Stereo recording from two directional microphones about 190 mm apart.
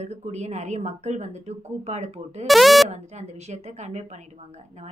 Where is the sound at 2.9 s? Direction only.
35° right (ahead or behind).